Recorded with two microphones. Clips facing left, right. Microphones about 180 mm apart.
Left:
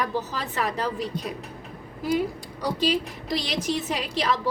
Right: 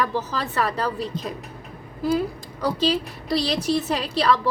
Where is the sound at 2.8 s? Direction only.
15° left (ahead or behind).